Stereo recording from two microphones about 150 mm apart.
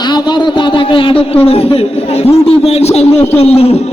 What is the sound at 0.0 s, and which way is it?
A man's voice, 30° left (ahead or behind).